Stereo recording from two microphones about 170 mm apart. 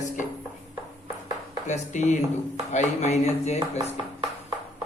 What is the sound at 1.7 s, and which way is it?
A man's voice, 45° left (ahead or behind).